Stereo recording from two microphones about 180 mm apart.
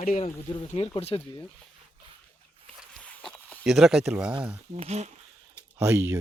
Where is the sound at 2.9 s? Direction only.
5° left (ahead or behind).